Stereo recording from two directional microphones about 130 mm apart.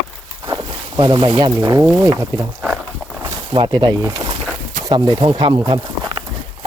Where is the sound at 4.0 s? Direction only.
25° right (ahead or behind).